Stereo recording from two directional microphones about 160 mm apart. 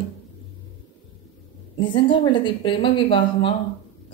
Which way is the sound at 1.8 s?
30° left (ahead or behind).